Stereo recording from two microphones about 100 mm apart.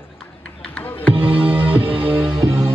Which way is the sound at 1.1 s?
65° right (ahead or behind).